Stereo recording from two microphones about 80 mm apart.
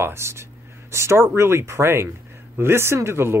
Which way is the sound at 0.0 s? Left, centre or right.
Right.